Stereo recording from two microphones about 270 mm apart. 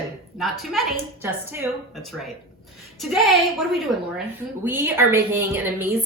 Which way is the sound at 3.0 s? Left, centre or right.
Centre.